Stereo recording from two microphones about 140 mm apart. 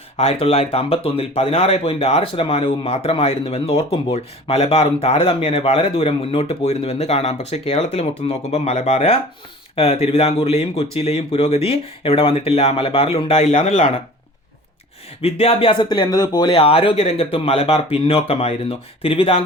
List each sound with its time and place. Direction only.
0.2 s speech: 45° left (ahead or behind)
15.2 s speech: 45° left (ahead or behind)